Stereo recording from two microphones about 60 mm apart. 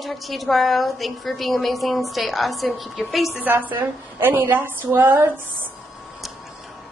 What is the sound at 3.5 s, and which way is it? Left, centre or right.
A woman's voice, right.